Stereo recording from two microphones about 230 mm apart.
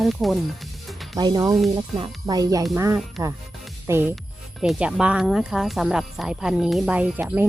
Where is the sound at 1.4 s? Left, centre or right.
Centre.